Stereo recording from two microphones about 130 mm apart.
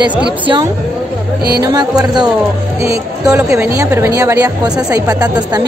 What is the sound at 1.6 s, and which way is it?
A woman's voice, 30° right (ahead or behind).